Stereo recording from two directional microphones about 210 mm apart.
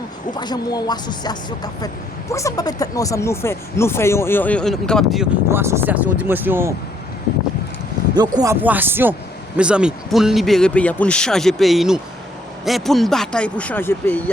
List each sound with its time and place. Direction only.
0.3 s speech: 20° left (ahead or behind); by 5.3 s centre (ahead or behind)
5.5 s speech: 10° right (ahead or behind)
8.1 s speech: 20° right (ahead or behind); by 14.2 s 10° left (ahead or behind)